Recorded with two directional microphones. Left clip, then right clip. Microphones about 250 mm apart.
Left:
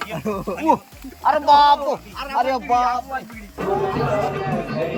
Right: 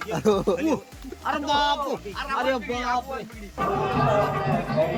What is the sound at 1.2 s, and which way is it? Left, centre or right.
Speech, centre.